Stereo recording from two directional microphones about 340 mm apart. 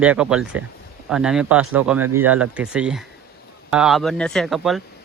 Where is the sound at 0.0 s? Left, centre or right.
Centre.